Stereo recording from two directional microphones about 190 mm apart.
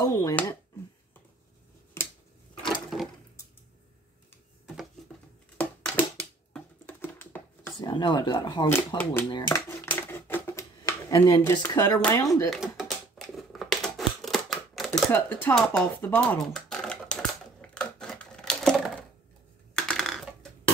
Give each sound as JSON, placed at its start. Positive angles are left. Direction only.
{"t": 0.0, "sound": "speech", "side_deg": 20}
{"t": 2.0, "sound": "finger snapping", "side_deg": 15}
{"t": 2.9, "sound": "a sound", "side_deg": 0}
{"t": 5.6, "sound": "a sound", "side_deg": 10}
{"t": 7.8, "sound": "speech", "side_deg": 25}
{"t": 8.6, "sound": "speech", "side_deg": 10}
{"t": 9.5, "sound": "a sound", "side_deg": 15}
{"t": 12.4, "sound": "speech", "side_deg": 0}
{"t": 13.4, "sound": "scissors", "side_deg": 0}
{"t": 14.9, "sound": "speech", "side_deg": 10}
{"t": 15.7, "sound": "typing", "side_deg": 10}